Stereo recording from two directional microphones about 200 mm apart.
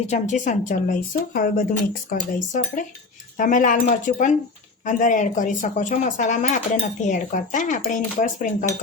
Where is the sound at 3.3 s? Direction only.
40° left (ahead or behind).